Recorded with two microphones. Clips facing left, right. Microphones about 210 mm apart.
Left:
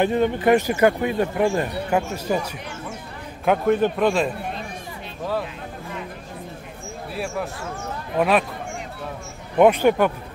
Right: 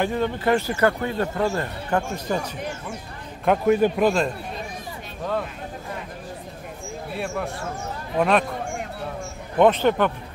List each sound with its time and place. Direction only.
0.0 s speech: 20° left (ahead or behind)
3.4 s a man's voice: 5° right (ahead or behind)
8.2 s a man's voice: 5° left (ahead or behind)
9.6 s speech: 10° left (ahead or behind)